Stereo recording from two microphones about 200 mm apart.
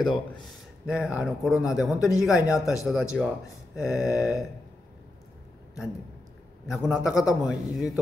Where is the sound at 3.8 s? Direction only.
5° right (ahead or behind).